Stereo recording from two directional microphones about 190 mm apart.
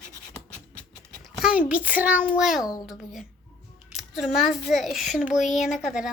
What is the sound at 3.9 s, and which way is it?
A child's voice, centre (ahead or behind).